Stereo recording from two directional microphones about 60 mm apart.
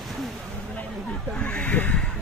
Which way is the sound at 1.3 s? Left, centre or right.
Centre.